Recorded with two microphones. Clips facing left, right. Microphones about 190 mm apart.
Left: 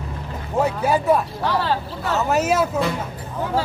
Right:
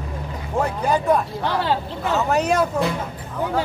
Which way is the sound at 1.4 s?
20° right (ahead or behind).